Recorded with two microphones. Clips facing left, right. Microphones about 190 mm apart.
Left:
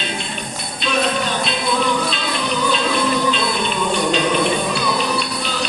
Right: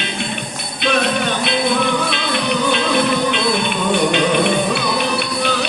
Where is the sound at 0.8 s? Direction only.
60° right (ahead or behind).